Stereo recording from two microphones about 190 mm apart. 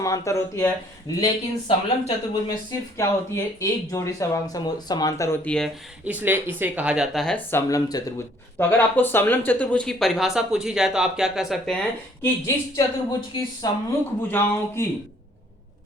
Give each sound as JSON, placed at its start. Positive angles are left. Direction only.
{"t": 0.0, "sound": "speech", "side_deg": 15}
{"t": 1.2, "sound": "speech", "side_deg": 30}
{"t": 3.0, "sound": "speech", "side_deg": 15}
{"t": 6.1, "sound": "speech", "side_deg": -10}
{"t": 12.2, "sound": "speech", "side_deg": 15}